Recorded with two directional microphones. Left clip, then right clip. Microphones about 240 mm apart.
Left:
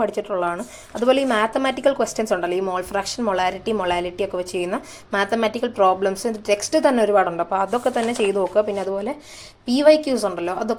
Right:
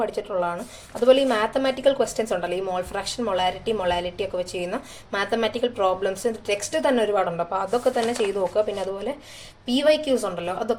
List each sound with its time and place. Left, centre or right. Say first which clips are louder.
0.2 s a woman's voice: left 3 dB; left